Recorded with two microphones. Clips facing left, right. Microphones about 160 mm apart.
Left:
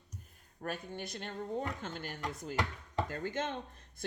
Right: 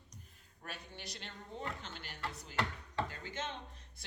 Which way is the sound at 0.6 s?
50° left (ahead or behind).